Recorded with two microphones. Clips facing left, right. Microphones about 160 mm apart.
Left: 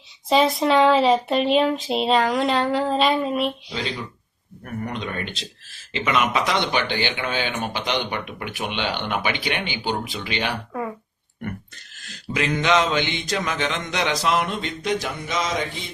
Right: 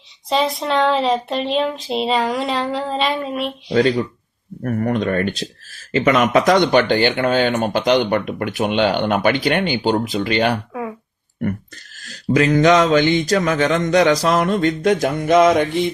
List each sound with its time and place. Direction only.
0.3 s speech: centre (ahead or behind)
4.6 s speech: 50° right (ahead or behind)
12.0 s speech: 40° right (ahead or behind); by 15.9 s 60° right (ahead or behind)